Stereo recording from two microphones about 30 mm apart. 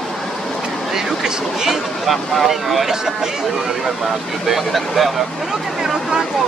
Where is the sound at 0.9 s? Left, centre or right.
Centre.